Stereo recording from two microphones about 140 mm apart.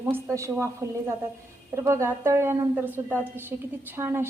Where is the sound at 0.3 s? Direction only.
20° right (ahead or behind).